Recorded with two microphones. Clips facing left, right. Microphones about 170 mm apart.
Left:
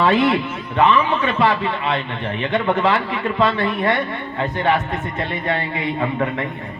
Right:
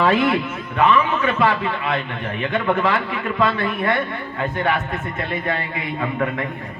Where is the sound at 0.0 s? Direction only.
35° left (ahead or behind).